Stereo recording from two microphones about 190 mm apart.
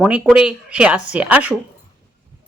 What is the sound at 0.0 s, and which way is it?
Speech, 5° right (ahead or behind).